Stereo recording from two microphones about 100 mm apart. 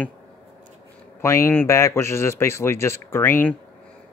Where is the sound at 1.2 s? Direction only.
25° left (ahead or behind).